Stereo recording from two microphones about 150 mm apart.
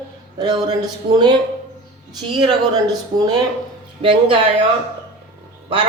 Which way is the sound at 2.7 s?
25° right (ahead or behind).